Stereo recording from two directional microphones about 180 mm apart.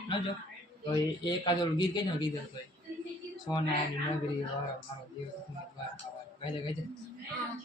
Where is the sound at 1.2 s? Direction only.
25° left (ahead or behind).